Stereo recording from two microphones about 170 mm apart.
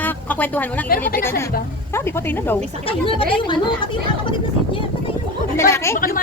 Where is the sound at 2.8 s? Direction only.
30° left (ahead or behind).